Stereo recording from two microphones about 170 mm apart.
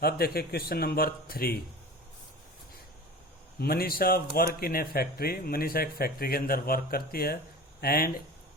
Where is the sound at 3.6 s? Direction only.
60° left (ahead or behind).